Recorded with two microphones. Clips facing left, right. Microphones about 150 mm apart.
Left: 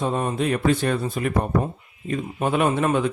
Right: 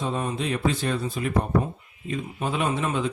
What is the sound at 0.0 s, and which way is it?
Speech, 50° left (ahead or behind).